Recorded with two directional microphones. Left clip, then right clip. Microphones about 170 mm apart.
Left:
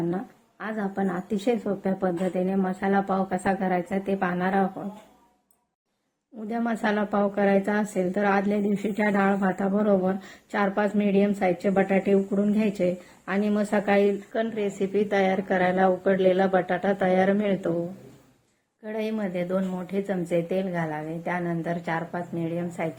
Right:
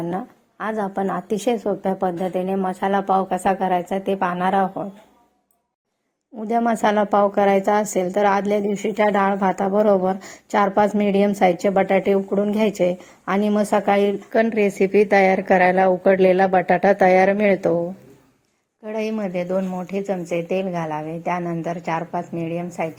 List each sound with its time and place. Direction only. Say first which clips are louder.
0.1 s a woman's voice: right 4 dB; 45° right (ahead or behind)
6.5 s a woman's voice: right 8 dB; 40° right (ahead or behind)
14.3 s a woman's voice: right 9 dB; 55° right (ahead or behind)
18.9 s a woman's voice: right 5 dB; 30° right (ahead or behind)